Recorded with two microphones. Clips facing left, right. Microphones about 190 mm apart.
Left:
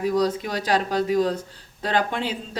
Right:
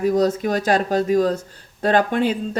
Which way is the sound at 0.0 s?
45° right (ahead or behind).